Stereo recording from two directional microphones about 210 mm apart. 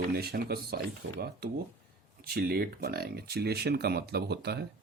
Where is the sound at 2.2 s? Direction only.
45° right (ahead or behind).